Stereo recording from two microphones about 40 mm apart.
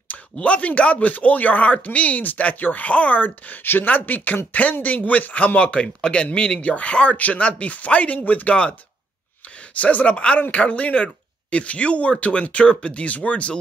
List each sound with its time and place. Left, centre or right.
0.1 s speech: left
9.8 s speech: left